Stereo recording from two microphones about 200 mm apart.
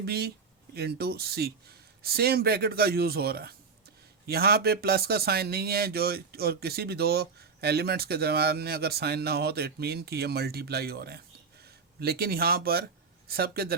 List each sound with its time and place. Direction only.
0.0 s speech: 50° right (ahead or behind)